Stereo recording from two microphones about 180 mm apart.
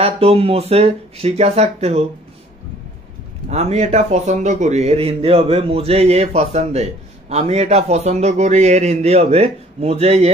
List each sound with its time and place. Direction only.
0.0 s a man's voice: 35° right (ahead or behind)
3.4 s a man's voice: 35° right (ahead or behind)